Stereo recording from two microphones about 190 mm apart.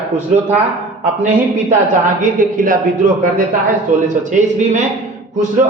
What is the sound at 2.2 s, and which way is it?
Speech, 45° right (ahead or behind).